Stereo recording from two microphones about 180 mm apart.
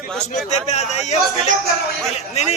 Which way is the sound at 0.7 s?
40° left (ahead or behind).